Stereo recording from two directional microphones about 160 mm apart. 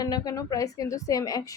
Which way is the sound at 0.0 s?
25° left (ahead or behind).